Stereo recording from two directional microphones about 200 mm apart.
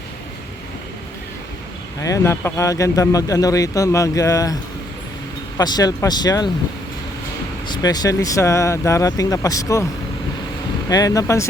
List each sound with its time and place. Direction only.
2.0 s speech: 15° left (ahead or behind)
5.5 s speech: 20° left (ahead or behind)
7.7 s speech: 20° left (ahead or behind)
10.8 s speech: 15° left (ahead or behind)